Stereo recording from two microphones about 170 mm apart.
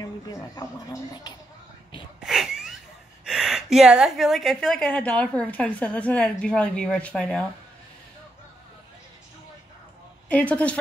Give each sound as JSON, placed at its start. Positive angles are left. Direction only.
{"t": 0.0, "sound": "speech", "side_deg": 20}
{"t": 2.2, "sound": "a sound", "side_deg": 0}
{"t": 3.3, "sound": "a woman's voice", "side_deg": 0}
{"t": 10.2, "sound": "a woman's voice", "side_deg": 10}